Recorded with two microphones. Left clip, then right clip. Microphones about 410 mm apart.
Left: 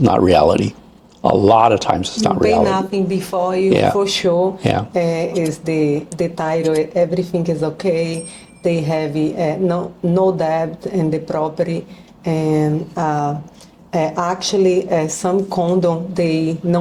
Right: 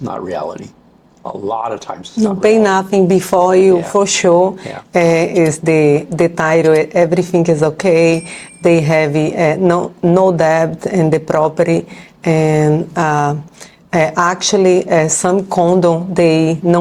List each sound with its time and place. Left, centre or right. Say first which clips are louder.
0.0 s speech: left 9 dB; left
2.4 s speech: right 5 dB; right